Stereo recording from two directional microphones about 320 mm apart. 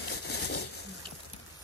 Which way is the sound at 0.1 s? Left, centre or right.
Left.